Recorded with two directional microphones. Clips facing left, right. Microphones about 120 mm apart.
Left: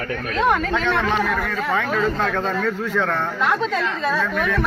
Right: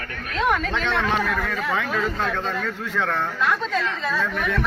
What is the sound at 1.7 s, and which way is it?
Speech, centre (ahead or behind).